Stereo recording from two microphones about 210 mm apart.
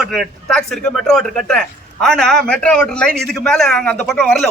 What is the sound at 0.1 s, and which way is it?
A man's voice, centre (ahead or behind).